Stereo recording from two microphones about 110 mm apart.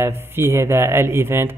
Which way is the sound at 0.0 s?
25° right (ahead or behind).